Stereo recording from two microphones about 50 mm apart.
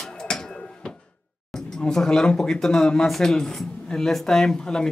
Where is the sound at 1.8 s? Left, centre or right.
Centre.